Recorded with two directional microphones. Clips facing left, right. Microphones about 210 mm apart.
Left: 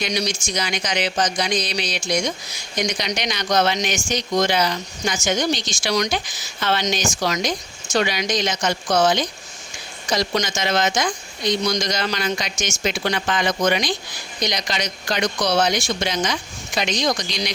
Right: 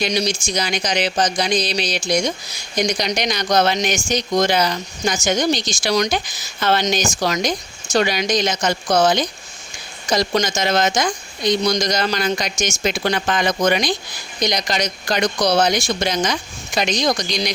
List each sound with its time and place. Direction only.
0.0 s speech: 30° right (ahead or behind)